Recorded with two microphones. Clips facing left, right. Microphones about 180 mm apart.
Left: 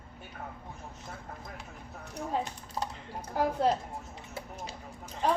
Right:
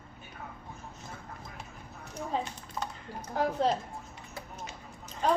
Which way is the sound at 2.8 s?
30° left (ahead or behind).